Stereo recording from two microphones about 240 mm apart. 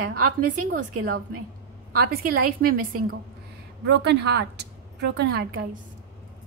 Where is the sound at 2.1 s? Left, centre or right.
Right.